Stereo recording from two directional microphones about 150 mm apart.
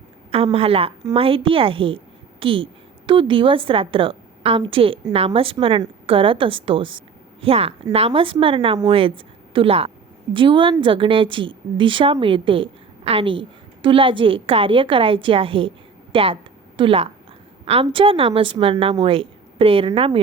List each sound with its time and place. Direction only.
0.3 s a woman's voice: 40° right (ahead or behind)